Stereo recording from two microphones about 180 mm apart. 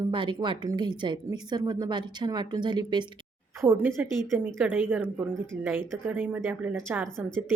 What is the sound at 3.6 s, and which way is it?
Speech, 15° right (ahead or behind).